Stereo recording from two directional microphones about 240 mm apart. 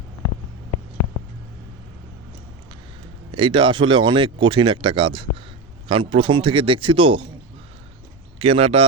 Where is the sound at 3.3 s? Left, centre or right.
Right.